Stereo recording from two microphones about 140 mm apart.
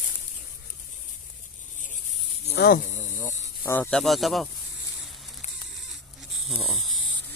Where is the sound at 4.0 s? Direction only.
Centre (ahead or behind).